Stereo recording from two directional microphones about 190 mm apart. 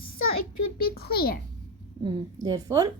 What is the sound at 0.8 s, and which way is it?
Speech, 55° left (ahead or behind).